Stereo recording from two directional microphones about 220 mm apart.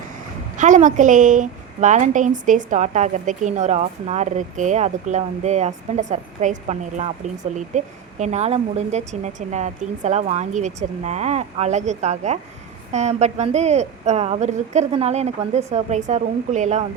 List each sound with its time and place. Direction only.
0.5 s a woman's voice: 35° right (ahead or behind)